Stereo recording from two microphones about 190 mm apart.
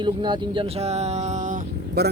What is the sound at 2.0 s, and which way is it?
Speech, 55° right (ahead or behind).